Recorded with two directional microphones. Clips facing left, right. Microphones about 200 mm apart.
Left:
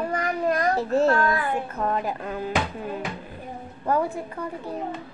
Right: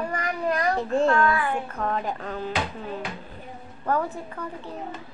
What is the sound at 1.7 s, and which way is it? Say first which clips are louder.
Speech: left 2 dB; 5° left (ahead or behind).